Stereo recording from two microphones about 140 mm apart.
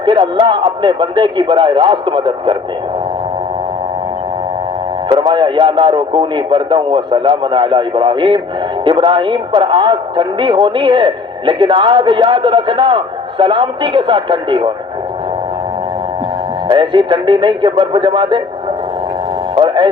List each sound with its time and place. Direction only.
0.0 s speech: 35° right (ahead or behind)
5.1 s speech: 35° right (ahead or behind)
16.6 s speech: 35° right (ahead or behind)
19.5 s speech: 35° right (ahead or behind)